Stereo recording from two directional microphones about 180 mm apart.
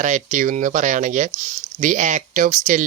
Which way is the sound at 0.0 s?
45° right (ahead or behind).